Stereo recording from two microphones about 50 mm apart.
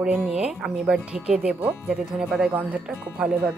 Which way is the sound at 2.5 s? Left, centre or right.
Right.